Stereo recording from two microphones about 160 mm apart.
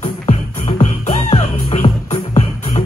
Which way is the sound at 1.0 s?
45° left (ahead or behind).